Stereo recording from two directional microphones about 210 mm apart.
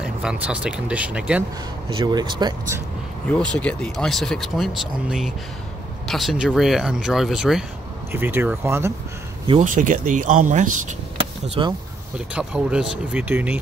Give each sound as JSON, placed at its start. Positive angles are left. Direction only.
{"t": 0.0, "sound": "speech", "side_deg": -5}
{"t": 1.9, "sound": "speech", "side_deg": -20}
{"t": 3.3, "sound": "speech", "side_deg": 5}
{"t": 9.6, "sound": "speech", "side_deg": -35}
{"t": 11.6, "sound": "speech", "side_deg": -20}
{"t": 12.4, "sound": "speech", "side_deg": -5}